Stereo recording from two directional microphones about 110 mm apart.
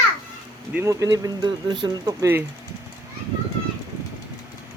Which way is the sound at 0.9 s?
30° right (ahead or behind).